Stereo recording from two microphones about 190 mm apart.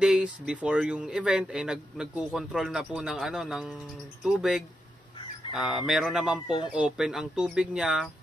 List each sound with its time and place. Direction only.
0.0 s speech: 5° right (ahead or behind)
6.4 s speech: 25° left (ahead or behind)
6.7 s speech: 5° right (ahead or behind)